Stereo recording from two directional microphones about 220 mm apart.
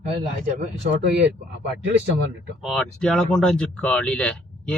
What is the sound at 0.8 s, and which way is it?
Speech, 45° right (ahead or behind).